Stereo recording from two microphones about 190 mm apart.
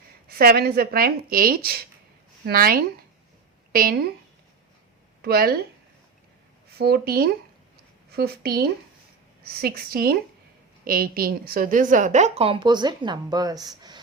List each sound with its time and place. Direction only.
0.3 s a woman's voice: 50° right (ahead or behind)
5.2 s speech: 55° right (ahead or behind)
6.7 s a woman's voice: 55° right (ahead or behind); by 14.0 s 20° right (ahead or behind)